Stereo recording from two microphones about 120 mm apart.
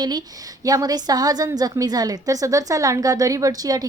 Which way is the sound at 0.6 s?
30° right (ahead or behind).